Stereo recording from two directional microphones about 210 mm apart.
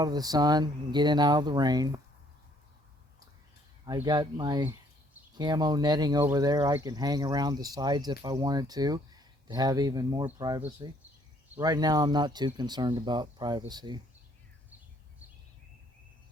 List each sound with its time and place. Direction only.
0.0 s speech: 20° right (ahead or behind)
3.8 s speech: 20° right (ahead or behind)